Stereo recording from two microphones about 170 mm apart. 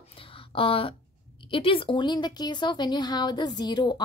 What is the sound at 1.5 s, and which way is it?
Speech, 30° left (ahead or behind).